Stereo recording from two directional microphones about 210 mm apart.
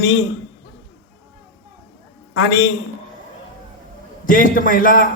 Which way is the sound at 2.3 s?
55° left (ahead or behind).